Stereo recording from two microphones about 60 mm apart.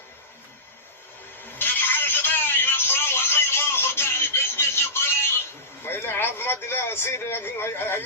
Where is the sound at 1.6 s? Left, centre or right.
Left.